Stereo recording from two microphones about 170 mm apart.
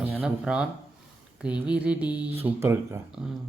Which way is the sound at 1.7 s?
5° right (ahead or behind).